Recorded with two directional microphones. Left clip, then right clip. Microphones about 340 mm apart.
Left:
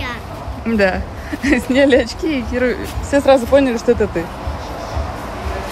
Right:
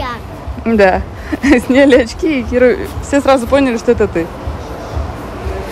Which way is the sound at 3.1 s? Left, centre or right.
Centre.